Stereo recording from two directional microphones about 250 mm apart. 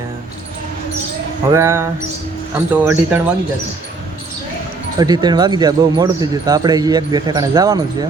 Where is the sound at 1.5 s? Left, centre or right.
Centre.